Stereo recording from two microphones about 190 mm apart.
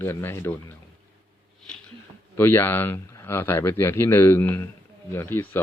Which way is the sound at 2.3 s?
10° left (ahead or behind).